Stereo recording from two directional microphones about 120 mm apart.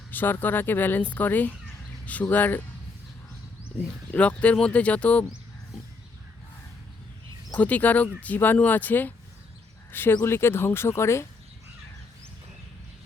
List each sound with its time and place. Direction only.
0.1 s speech: 15° left (ahead or behind)
4.1 s speech: 10° left (ahead or behind)
7.5 s speech: 10° left (ahead or behind)